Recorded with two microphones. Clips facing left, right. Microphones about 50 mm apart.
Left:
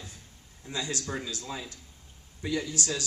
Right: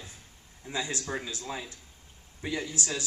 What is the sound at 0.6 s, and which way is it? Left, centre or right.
A man's voice, right.